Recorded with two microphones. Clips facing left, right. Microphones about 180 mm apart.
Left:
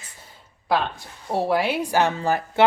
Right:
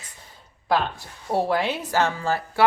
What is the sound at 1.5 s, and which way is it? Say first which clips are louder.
Speech: left 2 dB; 10° left (ahead or behind).